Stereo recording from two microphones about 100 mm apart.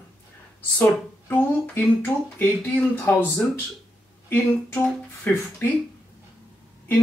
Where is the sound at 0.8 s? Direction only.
20° left (ahead or behind).